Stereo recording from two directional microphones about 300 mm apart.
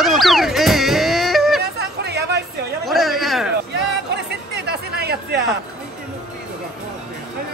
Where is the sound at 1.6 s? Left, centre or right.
Right.